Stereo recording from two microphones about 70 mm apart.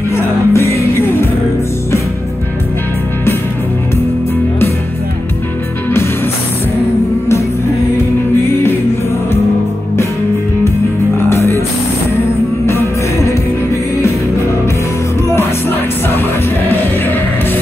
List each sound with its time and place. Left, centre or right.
0.1 s music: left
11.2 s music: left
12.6 s music: left